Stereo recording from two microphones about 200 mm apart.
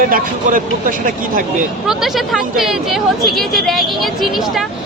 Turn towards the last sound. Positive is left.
turn(degrees=0)  # may be behind; listen again after turning